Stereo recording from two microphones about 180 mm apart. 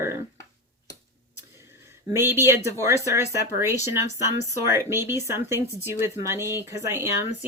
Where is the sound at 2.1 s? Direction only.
15° right (ahead or behind).